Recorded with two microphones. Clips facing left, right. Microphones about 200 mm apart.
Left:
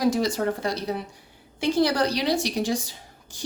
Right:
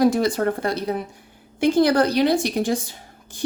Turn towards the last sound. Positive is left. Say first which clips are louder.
# right 3 dB
turn(degrees=-55)  # may be behind; listen again after turning